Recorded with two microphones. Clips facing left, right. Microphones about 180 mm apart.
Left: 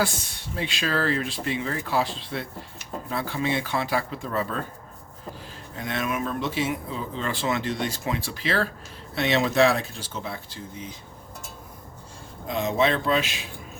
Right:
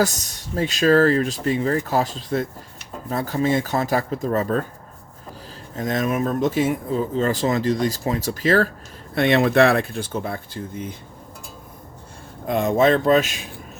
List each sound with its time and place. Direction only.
0.0 s speech: 40° right (ahead or behind)
5.7 s speech: 40° right (ahead or behind)
9.1 s speech: 55° right (ahead or behind)
12.5 s speech: 50° right (ahead or behind)